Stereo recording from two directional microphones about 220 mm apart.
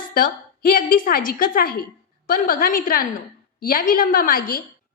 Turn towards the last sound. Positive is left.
turn(degrees=40)  # may be behind; listen again after turning